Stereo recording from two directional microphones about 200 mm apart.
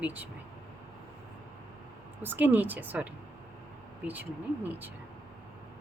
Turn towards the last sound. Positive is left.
turn(degrees=-10)  # may be behind; listen again after turning